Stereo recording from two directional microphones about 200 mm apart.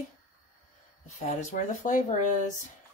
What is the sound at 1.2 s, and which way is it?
Speech, 35° left (ahead or behind).